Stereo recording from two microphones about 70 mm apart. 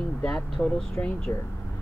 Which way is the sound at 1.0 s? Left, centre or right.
Left.